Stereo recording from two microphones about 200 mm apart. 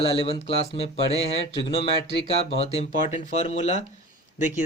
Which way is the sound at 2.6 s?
30° left (ahead or behind).